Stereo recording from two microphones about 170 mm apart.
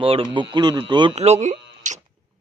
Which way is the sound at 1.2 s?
40° right (ahead or behind).